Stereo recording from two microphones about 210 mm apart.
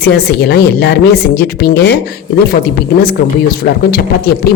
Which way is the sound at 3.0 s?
45° left (ahead or behind).